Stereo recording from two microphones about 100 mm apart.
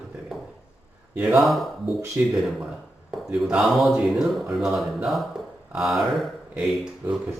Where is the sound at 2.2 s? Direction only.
20° right (ahead or behind).